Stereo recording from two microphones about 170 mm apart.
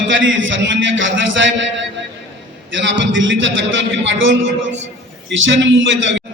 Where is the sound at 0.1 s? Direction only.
90° right.